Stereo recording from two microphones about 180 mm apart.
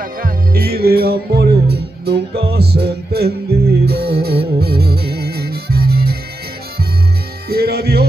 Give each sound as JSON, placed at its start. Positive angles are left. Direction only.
{"t": 0.0, "sound": "music", "side_deg": -55}
{"t": 7.4, "sound": "music", "side_deg": -60}